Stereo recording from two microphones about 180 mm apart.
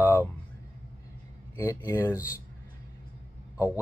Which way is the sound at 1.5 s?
15° left (ahead or behind).